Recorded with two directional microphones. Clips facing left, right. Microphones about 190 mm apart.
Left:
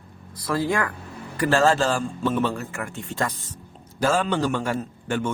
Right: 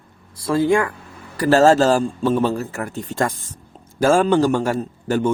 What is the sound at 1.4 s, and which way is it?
A man's voice, 40° right (ahead or behind).